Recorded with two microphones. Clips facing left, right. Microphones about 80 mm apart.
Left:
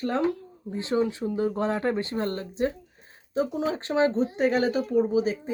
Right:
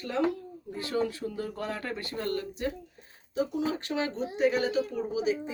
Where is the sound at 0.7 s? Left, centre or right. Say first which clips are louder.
Left 5 dB; left.